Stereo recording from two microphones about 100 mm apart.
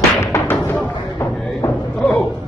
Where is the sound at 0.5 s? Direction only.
15° left (ahead or behind).